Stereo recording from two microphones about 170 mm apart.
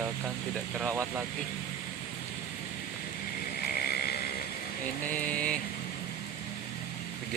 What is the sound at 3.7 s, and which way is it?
Vehicle, 65° left (ahead or behind).